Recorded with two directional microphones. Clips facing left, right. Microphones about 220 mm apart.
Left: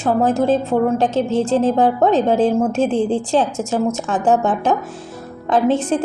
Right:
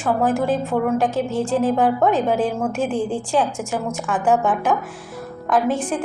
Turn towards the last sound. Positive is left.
turn(degrees=25)  # may be behind; listen again after turning